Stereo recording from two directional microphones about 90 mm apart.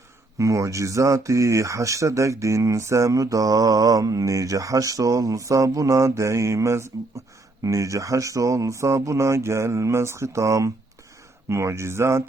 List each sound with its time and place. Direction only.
0.3 s speech: 35° right (ahead or behind)